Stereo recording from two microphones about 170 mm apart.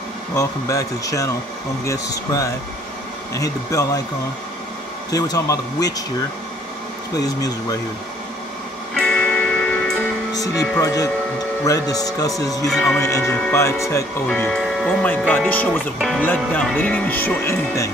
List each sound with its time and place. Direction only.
0.4 s speech: 20° left (ahead or behind)
5.1 s speech: 20° left (ahead or behind)
7.2 s speech: 20° left (ahead or behind)
8.9 s music: 5° left (ahead or behind)
10.3 s speech: 20° left (ahead or behind)
12.6 s speech: 5° left (ahead or behind)
13.0 s speech: 20° left (ahead or behind)
14.2 s speech: 5° left (ahead or behind)